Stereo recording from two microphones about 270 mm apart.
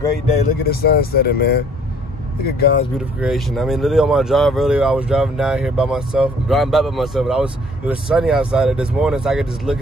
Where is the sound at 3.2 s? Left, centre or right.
Centre.